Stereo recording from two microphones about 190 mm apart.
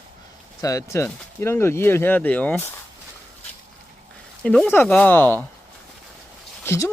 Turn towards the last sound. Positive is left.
turn(degrees=15)  # may be behind; listen again after turning